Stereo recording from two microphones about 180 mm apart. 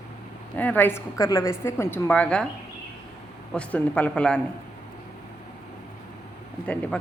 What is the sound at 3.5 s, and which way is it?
Speech, 5° left (ahead or behind).